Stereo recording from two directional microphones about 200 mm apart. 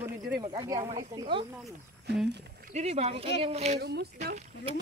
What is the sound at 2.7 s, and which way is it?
Speech, 35° right (ahead or behind).